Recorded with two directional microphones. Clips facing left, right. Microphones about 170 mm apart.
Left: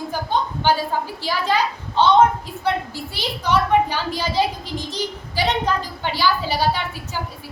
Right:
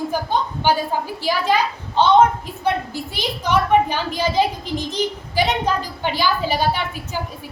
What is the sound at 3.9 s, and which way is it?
Speech, 20° right (ahead or behind).